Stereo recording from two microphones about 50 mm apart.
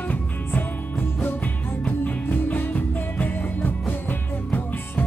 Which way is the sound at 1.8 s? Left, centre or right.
Left.